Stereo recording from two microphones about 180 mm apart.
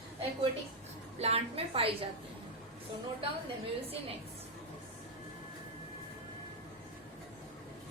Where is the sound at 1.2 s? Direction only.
35° right (ahead or behind).